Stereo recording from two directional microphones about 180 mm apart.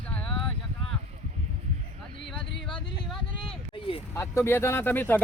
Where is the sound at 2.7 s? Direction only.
25° left (ahead or behind).